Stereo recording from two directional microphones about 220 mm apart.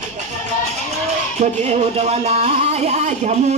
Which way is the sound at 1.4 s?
30° right (ahead or behind).